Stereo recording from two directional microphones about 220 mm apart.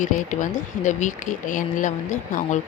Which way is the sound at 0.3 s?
35° left (ahead or behind).